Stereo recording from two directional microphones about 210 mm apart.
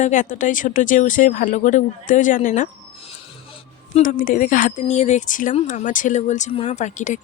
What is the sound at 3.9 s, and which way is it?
A woman's voice, 40° left (ahead or behind).